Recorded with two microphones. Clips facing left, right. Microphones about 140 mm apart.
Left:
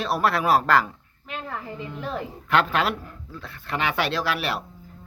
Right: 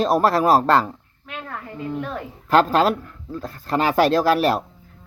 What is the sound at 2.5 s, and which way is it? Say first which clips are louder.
Speech: right 6 dB; 35° right (ahead or behind).